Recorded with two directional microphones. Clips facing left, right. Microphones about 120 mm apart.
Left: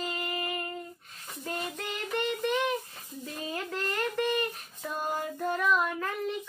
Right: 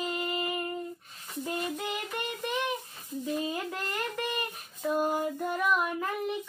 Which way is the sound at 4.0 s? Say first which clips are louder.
Left 6 dB; 10° right (ahead or behind).